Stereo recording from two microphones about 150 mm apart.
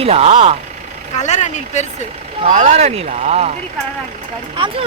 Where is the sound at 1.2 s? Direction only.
50° left (ahead or behind).